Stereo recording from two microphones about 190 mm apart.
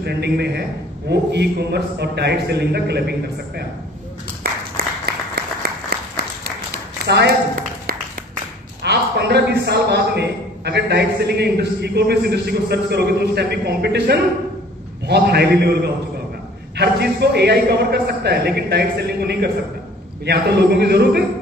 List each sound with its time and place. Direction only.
0.0 s a man's voice: 60° right (ahead or behind)
4.4 s applause: 55° right (ahead or behind)
7.1 s a sound: 60° right (ahead or behind)
9.7 s a man's voice: 60° right (ahead or behind)